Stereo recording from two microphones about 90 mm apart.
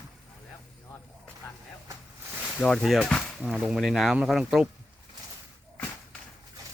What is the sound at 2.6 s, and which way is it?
Speech, 5° left (ahead or behind).